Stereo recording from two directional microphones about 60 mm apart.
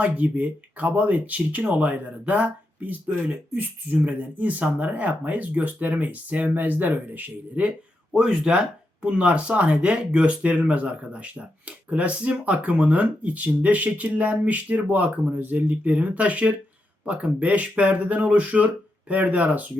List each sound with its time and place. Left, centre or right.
0.0 s speech: right
7.6 s speech: centre